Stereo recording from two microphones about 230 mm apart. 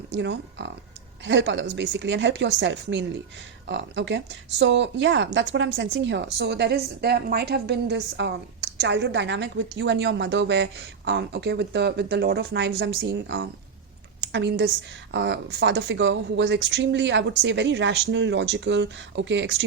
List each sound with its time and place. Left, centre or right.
0.1 s a woman's voice: right